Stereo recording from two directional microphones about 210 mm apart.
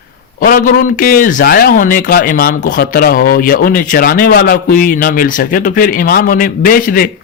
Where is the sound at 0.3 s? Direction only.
45° left (ahead or behind).